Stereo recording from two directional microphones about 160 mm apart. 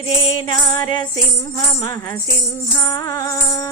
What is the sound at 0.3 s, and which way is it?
Music, 25° left (ahead or behind).